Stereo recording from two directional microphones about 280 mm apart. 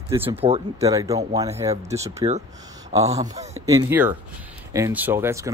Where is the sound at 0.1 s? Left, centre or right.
Centre.